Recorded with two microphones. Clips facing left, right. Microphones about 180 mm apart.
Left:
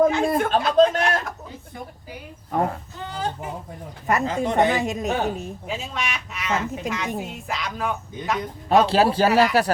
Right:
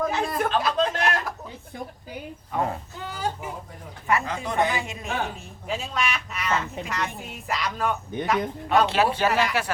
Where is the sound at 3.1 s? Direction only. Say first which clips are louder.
Left 1 dB; 10° right (ahead or behind).